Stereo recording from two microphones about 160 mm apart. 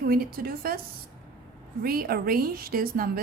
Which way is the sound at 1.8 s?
65° right (ahead or behind).